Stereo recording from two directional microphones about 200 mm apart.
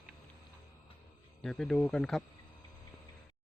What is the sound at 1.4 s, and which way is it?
Speech, centre (ahead or behind).